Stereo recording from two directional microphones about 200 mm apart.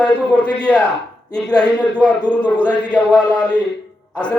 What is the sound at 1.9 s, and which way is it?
Mantra, 5° left (ahead or behind).